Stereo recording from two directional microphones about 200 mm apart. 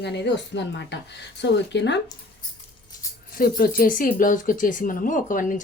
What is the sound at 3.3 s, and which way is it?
Speech, 50° left (ahead or behind).